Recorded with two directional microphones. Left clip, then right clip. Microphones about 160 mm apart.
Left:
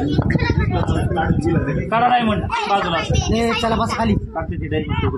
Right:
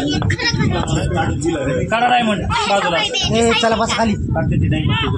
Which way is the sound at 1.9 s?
80° right.